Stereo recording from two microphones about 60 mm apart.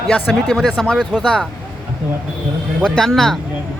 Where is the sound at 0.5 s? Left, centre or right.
Centre.